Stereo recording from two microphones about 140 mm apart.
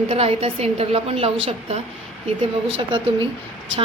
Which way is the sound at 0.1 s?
45° right (ahead or behind).